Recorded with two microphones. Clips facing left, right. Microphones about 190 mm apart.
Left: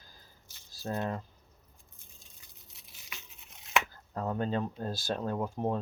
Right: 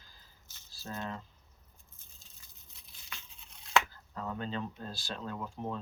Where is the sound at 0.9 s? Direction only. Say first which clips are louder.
Left 6 dB; 40° left (ahead or behind).